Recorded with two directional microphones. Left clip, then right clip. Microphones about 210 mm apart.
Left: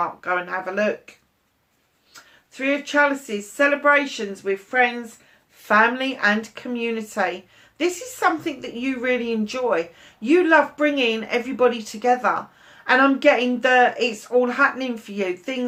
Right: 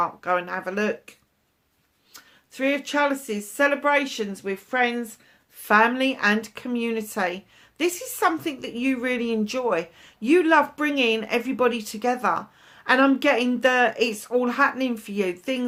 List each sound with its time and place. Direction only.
0.0 s a woman's voice: 45° right (ahead or behind)
2.1 s a woman's voice: 45° right (ahead or behind)